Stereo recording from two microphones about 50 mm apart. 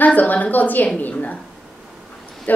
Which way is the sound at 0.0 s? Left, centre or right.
Left.